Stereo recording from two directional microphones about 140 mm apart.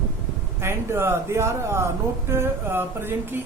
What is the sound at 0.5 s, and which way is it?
Speech, 15° right (ahead or behind).